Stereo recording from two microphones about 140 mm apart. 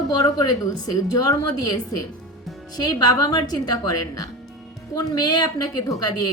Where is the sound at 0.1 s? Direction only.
25° left (ahead or behind).